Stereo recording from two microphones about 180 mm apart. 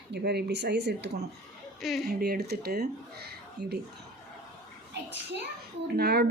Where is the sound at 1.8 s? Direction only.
Centre (ahead or behind).